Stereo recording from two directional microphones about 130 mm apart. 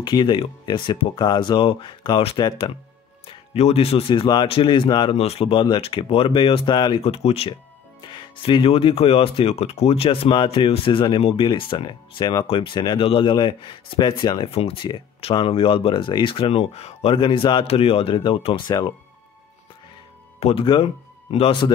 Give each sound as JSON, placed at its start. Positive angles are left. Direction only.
{"t": 0.0, "sound": "speech", "side_deg": 35}
{"t": 3.5, "sound": "speech", "side_deg": 50}
{"t": 4.1, "sound": "speech", "side_deg": 35}
{"t": 5.1, "sound": "speech", "side_deg": 50}
{"t": 7.0, "sound": "speech", "side_deg": 50}
{"t": 8.0, "sound": "speech", "side_deg": 40}
{"t": 14.5, "sound": "speech", "side_deg": 45}
{"t": 18.7, "sound": "speech", "side_deg": 35}
{"t": 20.3, "sound": "speech", "side_deg": 50}